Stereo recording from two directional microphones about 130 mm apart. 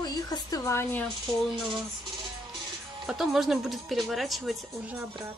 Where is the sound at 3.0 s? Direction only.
Centre (ahead or behind).